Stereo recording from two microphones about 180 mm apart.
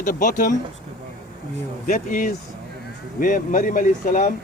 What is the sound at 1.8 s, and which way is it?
Speech, 50° left (ahead or behind).